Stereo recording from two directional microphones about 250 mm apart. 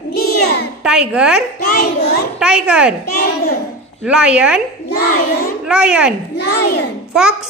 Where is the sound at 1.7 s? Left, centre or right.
Left.